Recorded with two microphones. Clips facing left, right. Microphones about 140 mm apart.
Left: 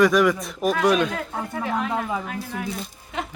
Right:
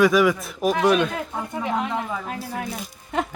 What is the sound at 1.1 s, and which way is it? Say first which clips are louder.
Speech: even; 15° right (ahead or behind).